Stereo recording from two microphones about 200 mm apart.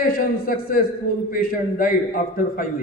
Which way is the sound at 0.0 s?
45° left (ahead or behind).